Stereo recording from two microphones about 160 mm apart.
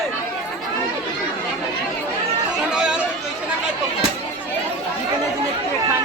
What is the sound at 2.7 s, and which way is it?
Chatter, 5° right (ahead or behind).